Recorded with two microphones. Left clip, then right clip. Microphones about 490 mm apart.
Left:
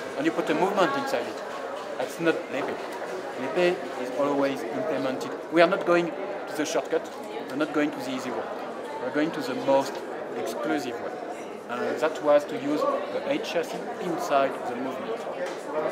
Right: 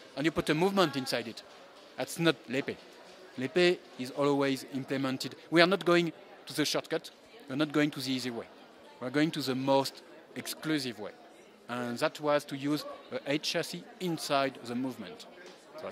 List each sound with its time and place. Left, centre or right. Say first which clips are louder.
0.2 s speech: left 4 dB; right
2.3 s speech: left 4 dB; right
4.2 s speech: left 3 dB; right
11.7 s speech: left 6 dB; right